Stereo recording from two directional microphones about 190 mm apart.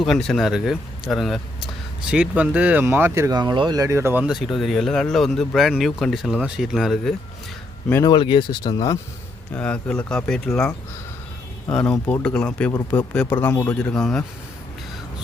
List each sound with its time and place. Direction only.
0.0 s speech: centre (ahead or behind)
7.9 s a man's voice: 10° left (ahead or behind)
8.1 s speech: 25° left (ahead or behind)
9.5 s speech: 5° left (ahead or behind)
11.7 s a man's voice: 5° left (ahead or behind)